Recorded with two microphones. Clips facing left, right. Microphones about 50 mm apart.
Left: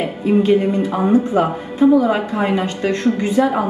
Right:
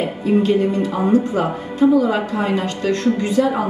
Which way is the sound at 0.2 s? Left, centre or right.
Left.